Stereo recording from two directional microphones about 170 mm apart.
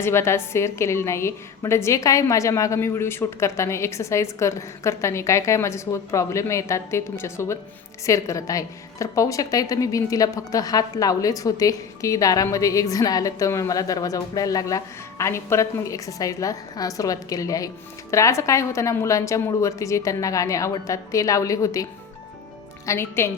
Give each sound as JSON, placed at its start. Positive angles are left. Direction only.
{"t": 0.0, "sound": "a woman's voice", "side_deg": 15}
{"t": 22.9, "sound": "a woman's voice", "side_deg": 15}